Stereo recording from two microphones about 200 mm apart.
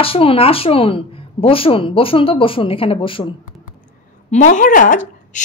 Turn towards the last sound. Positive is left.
turn(degrees=40)  # may be behind; listen again after turning